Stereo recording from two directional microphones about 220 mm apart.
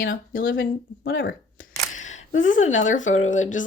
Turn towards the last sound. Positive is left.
turn(degrees=35)  # may be behind; listen again after turning